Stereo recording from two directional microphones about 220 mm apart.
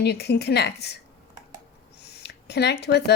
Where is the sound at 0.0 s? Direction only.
50° left (ahead or behind).